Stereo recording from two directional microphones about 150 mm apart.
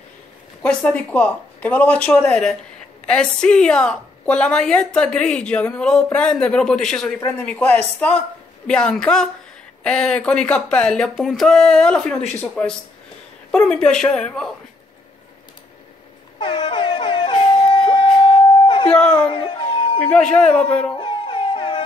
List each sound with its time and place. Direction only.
0.6 s a woman's voice: 10° left (ahead or behind)
16.3 s air horn: 35° left (ahead or behind)
18.9 s a woman's voice: 5° left (ahead or behind)
19.2 s a sound: 35° left (ahead or behind)
20.0 s a woman's voice: 5° left (ahead or behind)
21.0 s music: 35° left (ahead or behind)